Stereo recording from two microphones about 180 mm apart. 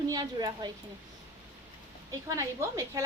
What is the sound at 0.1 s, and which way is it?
Speech, 20° right (ahead or behind).